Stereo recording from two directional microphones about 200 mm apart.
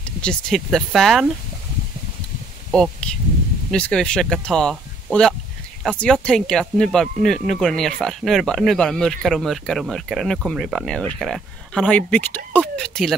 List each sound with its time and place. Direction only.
0.0 s speech: 5° left (ahead or behind)
2.7 s speech: 5° left (ahead or behind)